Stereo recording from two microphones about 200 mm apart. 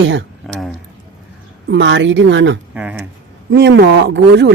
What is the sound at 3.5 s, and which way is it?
Speech, 60° right (ahead or behind).